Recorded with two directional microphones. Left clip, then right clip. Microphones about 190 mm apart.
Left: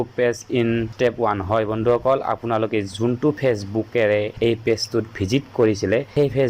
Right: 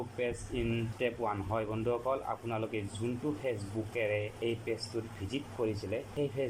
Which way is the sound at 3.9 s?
40° left (ahead or behind).